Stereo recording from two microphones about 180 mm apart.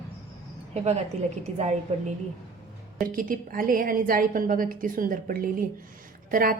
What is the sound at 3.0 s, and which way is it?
A woman's voice, 50° right (ahead or behind).